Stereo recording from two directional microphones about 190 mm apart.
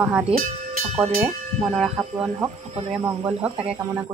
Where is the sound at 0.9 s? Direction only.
30° right (ahead or behind).